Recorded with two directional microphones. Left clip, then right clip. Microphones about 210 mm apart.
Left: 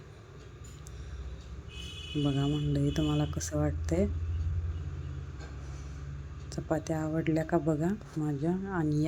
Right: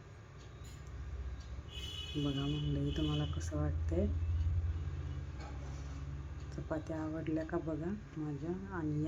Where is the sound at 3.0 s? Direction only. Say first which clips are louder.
Left 7 dB; 25° left (ahead or behind).